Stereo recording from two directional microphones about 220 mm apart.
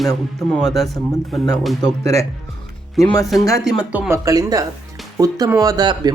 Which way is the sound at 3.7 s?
5° right (ahead or behind).